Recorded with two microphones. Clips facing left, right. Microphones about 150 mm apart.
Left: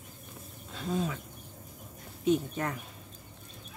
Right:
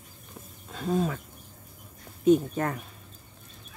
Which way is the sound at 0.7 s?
45° right (ahead or behind).